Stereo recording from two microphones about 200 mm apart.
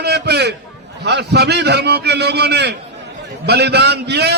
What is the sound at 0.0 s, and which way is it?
A man's voice, 55° right (ahead or behind).